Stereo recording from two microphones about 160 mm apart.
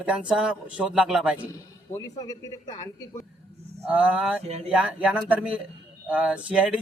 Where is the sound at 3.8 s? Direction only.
10° right (ahead or behind).